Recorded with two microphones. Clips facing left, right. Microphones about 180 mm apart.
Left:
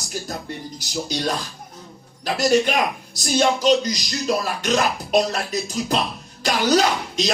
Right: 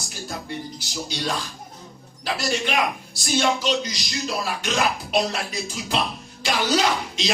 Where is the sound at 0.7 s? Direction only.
40° left (ahead or behind).